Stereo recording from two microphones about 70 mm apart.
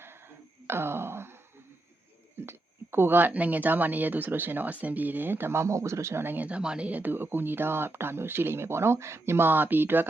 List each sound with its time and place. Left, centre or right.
0.7 s a sound: right
2.5 s speech: right
6.6 s speech: centre; by 10.1 s right